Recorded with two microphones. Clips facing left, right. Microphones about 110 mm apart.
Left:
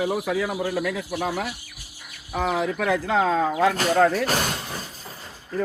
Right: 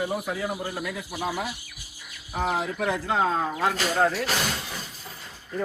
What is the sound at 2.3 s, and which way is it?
Speech, 90° left.